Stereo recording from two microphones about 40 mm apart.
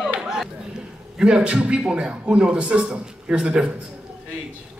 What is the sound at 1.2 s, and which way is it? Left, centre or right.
A man's voice, right.